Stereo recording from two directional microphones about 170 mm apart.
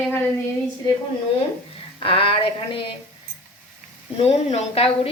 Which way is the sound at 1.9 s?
30° left (ahead or behind).